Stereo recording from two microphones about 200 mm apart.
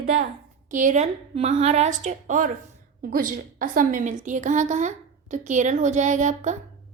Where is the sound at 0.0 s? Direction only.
35° right (ahead or behind).